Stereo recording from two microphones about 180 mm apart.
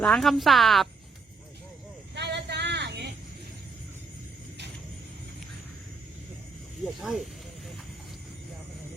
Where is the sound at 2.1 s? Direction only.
70° right (ahead or behind).